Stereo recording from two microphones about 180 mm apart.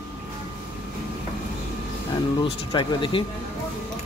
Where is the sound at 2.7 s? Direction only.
25° left (ahead or behind).